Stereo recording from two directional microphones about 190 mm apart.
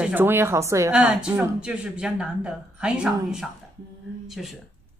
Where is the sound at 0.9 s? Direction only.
5° right (ahead or behind).